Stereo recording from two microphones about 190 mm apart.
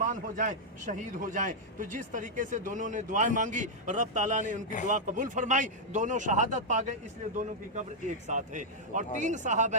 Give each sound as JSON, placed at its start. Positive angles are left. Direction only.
{"t": 0.1, "sound": "a man's voice", "side_deg": -45}